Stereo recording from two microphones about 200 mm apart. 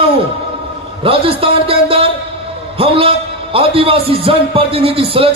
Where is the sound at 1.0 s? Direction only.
25° right (ahead or behind).